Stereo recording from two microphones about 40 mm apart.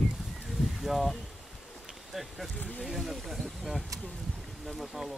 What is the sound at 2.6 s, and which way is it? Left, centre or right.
Speech, left.